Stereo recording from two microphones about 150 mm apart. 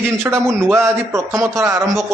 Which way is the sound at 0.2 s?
20° right (ahead or behind).